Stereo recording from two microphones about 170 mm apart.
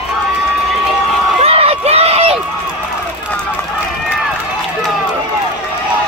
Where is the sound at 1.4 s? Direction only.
35° right (ahead or behind).